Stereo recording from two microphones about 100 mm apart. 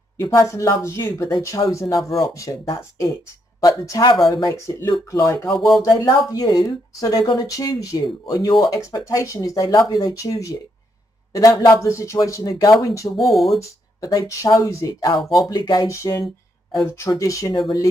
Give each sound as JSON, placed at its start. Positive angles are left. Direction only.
{"t": 0.2, "sound": "a woman's voice", "side_deg": 30}
{"t": 4.7, "sound": "a woman's voice", "side_deg": 25}
{"t": 5.5, "sound": "speech", "side_deg": 0}
{"t": 5.9, "sound": "a woman's voice", "side_deg": 40}
{"t": 13.2, "sound": "speech", "side_deg": 0}
{"t": 13.6, "sound": "a woman's voice", "side_deg": 35}